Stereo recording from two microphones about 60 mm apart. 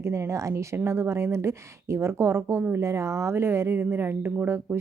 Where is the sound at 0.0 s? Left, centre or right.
Right.